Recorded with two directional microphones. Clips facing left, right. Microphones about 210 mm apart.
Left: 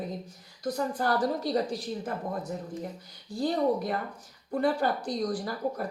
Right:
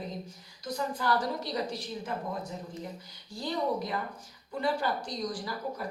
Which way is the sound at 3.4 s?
50° left (ahead or behind).